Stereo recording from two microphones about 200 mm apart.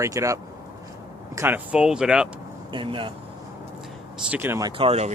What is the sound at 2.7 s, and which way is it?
Speech, 25° right (ahead or behind).